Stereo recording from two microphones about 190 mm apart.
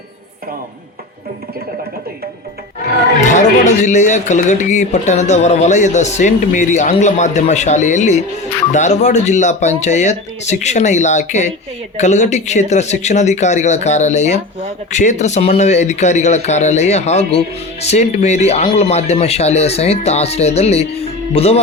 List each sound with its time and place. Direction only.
3.2 s speech: 40° left (ahead or behind)